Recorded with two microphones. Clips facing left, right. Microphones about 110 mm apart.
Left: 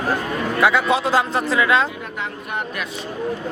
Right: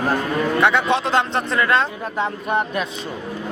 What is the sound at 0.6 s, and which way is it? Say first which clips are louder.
Speech: left 2 dB; 5° left (ahead or behind).